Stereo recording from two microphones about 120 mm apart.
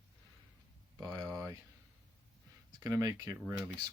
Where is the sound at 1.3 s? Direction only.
30° right (ahead or behind).